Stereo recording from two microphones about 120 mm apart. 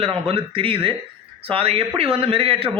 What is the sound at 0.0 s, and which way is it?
A man's voice, 50° right (ahead or behind).